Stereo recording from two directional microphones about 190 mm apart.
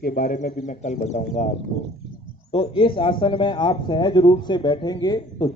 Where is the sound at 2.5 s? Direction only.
30° left (ahead or behind).